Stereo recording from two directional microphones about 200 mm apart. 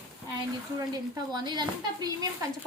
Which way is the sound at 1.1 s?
20° right (ahead or behind).